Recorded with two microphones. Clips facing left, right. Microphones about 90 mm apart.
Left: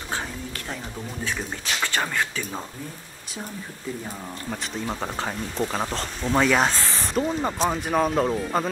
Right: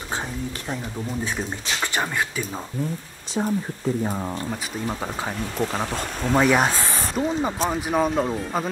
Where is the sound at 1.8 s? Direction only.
15° right (ahead or behind).